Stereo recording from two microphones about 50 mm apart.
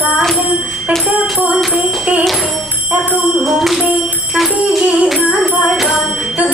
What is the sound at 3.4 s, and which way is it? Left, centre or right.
Music, centre.